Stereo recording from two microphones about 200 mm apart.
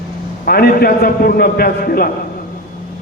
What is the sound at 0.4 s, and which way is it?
A man's voice, 50° left (ahead or behind).